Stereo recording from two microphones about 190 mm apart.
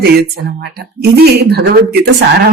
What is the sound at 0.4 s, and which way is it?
Speech, 60° right (ahead or behind).